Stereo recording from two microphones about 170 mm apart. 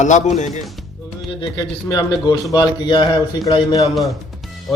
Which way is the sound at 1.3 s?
25° left (ahead or behind).